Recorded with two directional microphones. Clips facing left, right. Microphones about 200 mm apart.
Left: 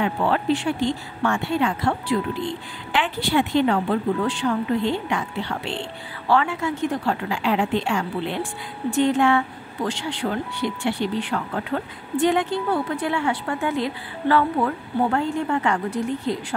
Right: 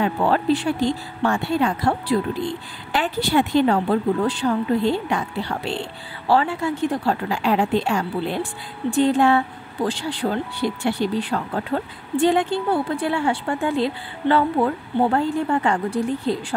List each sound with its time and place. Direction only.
0.0 s speech: 35° right (ahead or behind)